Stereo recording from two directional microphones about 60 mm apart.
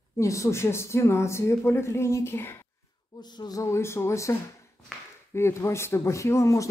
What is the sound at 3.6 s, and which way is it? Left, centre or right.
Speech, left.